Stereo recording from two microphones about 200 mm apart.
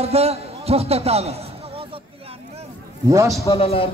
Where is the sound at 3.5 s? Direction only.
30° left (ahead or behind).